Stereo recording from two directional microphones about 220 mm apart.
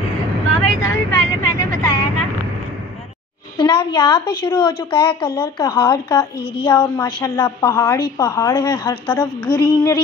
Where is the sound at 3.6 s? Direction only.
20° left (ahead or behind).